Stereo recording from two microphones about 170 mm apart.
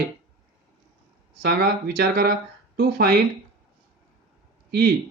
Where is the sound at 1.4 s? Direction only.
70° right (ahead or behind).